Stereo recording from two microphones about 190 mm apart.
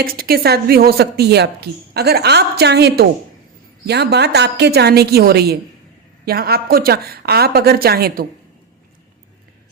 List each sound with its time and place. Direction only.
0.0 s speech: 55° right (ahead or behind)